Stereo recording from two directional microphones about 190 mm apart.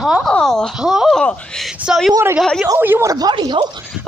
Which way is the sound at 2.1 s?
15° right (ahead or behind).